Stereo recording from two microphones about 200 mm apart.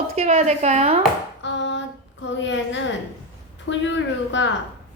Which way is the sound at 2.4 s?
65° left (ahead or behind).